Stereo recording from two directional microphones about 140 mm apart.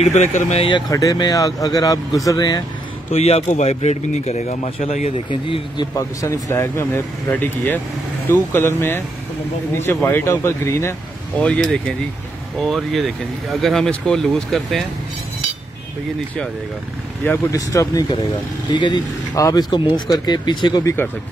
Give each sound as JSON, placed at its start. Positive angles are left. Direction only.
{"t": 0.0, "sound": "speech", "side_deg": 55}
{"t": 0.6, "sound": "speech", "side_deg": 35}
{"t": 0.8, "sound": "speech", "side_deg": 25}
{"t": 3.1, "sound": "speech", "side_deg": 50}
{"t": 4.6, "sound": "speech", "side_deg": 45}
{"t": 5.9, "sound": "speech", "side_deg": 20}
{"t": 10.0, "sound": "speech", "side_deg": 15}
{"t": 11.4, "sound": "speech", "side_deg": 5}
{"t": 17.2, "sound": "speech", "side_deg": 15}
{"t": 17.6, "sound": "speech", "side_deg": 25}